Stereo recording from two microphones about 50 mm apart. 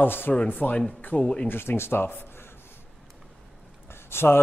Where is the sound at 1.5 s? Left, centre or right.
Left.